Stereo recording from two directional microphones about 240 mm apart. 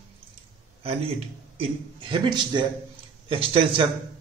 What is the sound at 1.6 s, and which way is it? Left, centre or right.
A man's voice, right.